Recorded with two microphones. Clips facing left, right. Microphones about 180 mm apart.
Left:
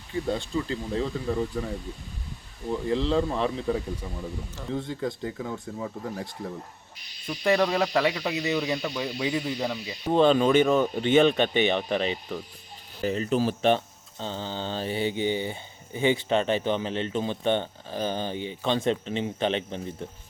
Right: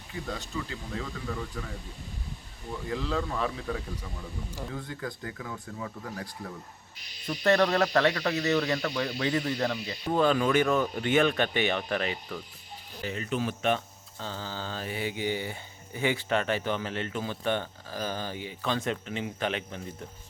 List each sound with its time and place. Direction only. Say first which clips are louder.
0.3 s speech: left 7 dB; 30° left (ahead or behind)
2.9 s speech: left 6 dB; 25° left (ahead or behind)
7.3 s speech: even; 10° left (ahead or behind)
10.1 s speech: left 5 dB; 25° left (ahead or behind)
13.0 s speech: left 7 dB; 35° left (ahead or behind)